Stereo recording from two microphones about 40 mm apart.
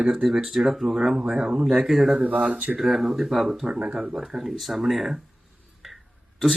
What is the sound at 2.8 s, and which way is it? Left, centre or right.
Speech, centre.